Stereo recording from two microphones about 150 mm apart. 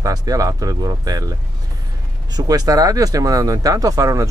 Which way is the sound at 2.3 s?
25° right (ahead or behind).